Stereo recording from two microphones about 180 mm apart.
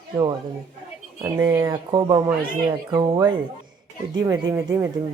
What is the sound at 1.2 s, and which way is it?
Speech, 20° right (ahead or behind).